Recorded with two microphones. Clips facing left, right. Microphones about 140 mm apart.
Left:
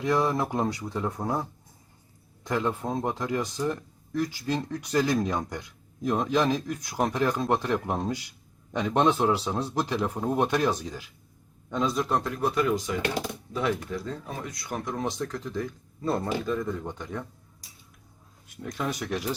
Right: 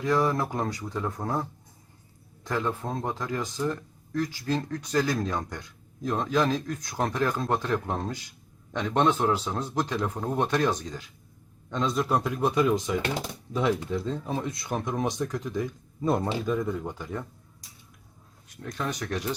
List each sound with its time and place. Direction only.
0.0 s speech: 20° left (ahead or behind)
1.2 s speech: 5° left (ahead or behind)
2.4 s speech: 15° left (ahead or behind); by 17.2 s 5° right (ahead or behind)
18.6 s speech: 5° left (ahead or behind)